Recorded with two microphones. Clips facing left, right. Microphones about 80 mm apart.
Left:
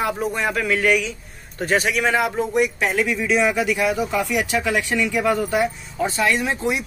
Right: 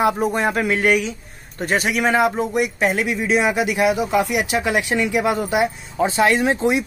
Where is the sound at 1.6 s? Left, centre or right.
Centre.